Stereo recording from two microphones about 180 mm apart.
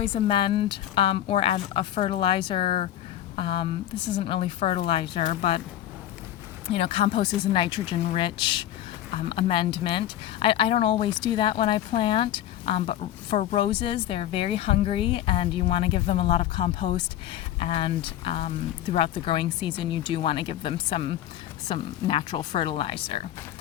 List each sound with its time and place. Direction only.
0.0 s speech: 30° left (ahead or behind)
6.7 s speech: 30° left (ahead or behind)